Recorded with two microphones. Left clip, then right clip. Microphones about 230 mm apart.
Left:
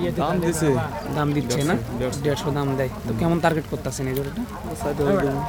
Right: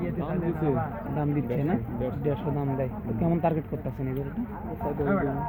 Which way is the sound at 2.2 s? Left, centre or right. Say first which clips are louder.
Left 6 dB; centre.